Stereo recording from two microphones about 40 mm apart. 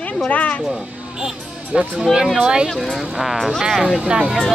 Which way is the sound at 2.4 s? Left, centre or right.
Right.